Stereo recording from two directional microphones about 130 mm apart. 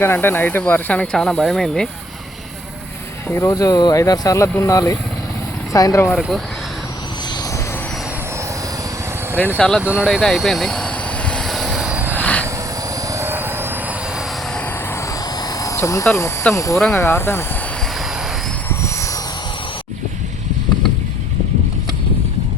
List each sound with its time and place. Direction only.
0.0 s speech: 15° left (ahead or behind)
3.2 s speech: 20° left (ahead or behind)
9.6 s speech: 5° left (ahead or behind)
9.8 s vehicle: 5° right (ahead or behind)
12.2 s vehicle: 10° left (ahead or behind)
13.1 s helicopter: 20° right (ahead or behind)
15.6 s speech: 25° left (ahead or behind)
16.7 s speech: 5° left (ahead or behind)
17.0 s speech: 20° left (ahead or behind)